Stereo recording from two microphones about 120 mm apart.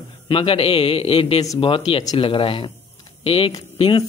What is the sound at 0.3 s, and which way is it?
A man's voice, 50° left (ahead or behind).